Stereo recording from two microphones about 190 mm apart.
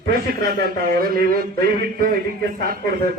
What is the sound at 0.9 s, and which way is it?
Speech, 50° right (ahead or behind).